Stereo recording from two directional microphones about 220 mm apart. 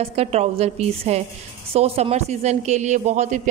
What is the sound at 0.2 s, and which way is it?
A woman's voice, 30° right (ahead or behind).